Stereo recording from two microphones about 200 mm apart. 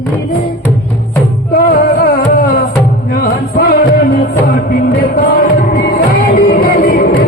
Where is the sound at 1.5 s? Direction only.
50° left (ahead or behind).